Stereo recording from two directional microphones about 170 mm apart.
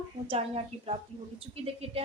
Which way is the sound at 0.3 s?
35° right (ahead or behind).